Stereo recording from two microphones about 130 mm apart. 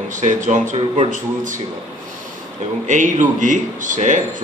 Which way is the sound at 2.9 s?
75° right (ahead or behind).